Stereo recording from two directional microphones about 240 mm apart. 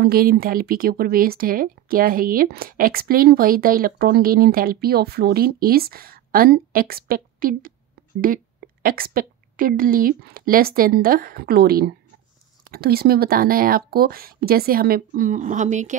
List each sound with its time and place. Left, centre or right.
0.0 s speech: right
8.8 s speech: right